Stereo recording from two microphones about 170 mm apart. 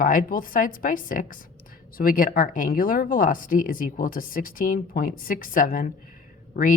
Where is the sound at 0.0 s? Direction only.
55° left (ahead or behind).